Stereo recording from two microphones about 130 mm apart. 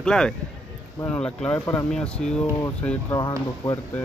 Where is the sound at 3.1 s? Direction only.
30° left (ahead or behind).